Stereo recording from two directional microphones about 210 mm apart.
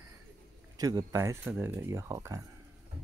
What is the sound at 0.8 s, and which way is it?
Speech, 15° right (ahead or behind).